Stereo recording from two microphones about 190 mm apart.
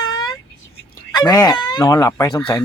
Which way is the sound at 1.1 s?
20° left (ahead or behind).